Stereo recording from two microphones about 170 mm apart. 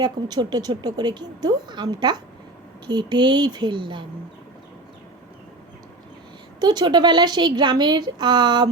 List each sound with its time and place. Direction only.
0.0 s speech: 25° right (ahead or behind)
6.6 s speech: 25° right (ahead or behind)